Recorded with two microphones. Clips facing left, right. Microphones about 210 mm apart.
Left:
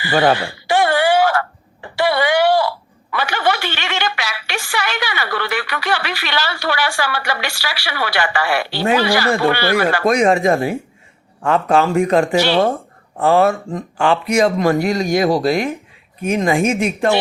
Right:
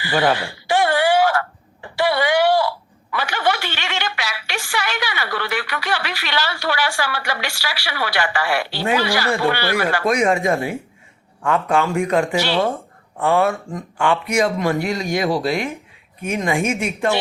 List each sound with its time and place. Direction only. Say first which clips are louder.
0.0 s a sound: left 3 dB; 60° left (ahead or behind)
3.1 s a woman's voice: left 2 dB; 70° left (ahead or behind)
10.0 s speech: left 4 dB; 35° left (ahead or behind)